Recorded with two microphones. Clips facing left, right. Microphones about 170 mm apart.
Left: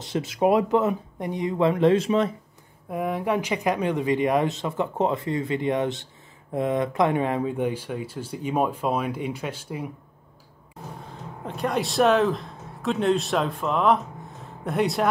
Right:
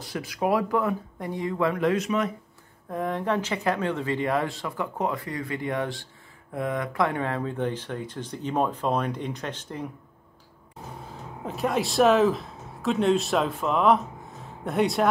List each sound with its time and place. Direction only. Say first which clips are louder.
0.0 s speech: left 5 dB; 25° left (ahead or behind)
2.9 s speech: left 2 dB; 10° left (ahead or behind)
11.4 s speech: even; centre (ahead or behind)